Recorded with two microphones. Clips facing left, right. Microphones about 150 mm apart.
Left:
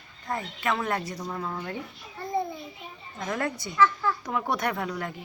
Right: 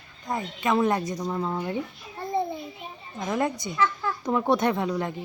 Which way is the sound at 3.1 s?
20° right (ahead or behind).